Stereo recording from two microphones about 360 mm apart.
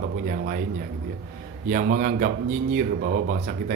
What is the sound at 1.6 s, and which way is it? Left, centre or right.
Speech, right.